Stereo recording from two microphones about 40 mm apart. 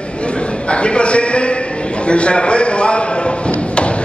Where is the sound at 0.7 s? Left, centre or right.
Left.